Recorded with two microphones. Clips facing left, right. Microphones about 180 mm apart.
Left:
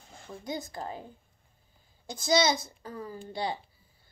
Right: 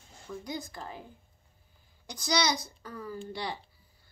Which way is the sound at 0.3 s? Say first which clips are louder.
Left 1 dB; 30° left (ahead or behind).